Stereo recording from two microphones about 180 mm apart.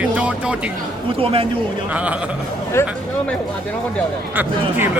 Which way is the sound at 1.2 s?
30° right (ahead or behind).